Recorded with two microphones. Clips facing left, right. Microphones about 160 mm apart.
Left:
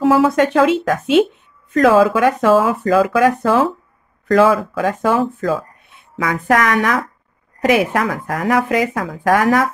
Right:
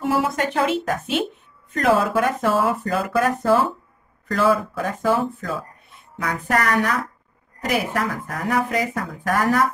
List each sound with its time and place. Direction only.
0.0 s speech: 90° left